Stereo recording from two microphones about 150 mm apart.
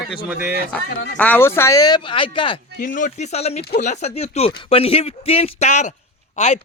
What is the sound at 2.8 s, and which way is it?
Speech, 60° left (ahead or behind).